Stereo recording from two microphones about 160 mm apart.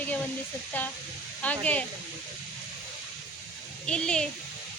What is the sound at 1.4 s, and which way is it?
Speech, 10° left (ahead or behind).